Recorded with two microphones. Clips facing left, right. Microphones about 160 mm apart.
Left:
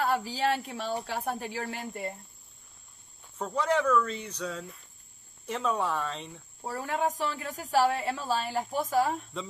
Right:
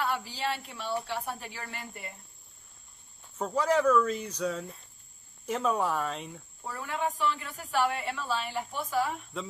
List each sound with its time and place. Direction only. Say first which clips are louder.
0.0 s a woman's voice: left 4 dB; 45° left (ahead or behind)
3.3 s speech: right 1 dB; 5° right (ahead or behind)
6.6 s a woman's voice: left 3 dB; 40° left (ahead or behind)